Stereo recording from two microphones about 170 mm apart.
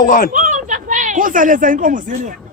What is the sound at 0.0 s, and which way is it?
Speech, 50° left (ahead or behind).